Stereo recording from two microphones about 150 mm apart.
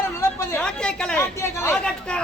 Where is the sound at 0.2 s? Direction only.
20° left (ahead or behind).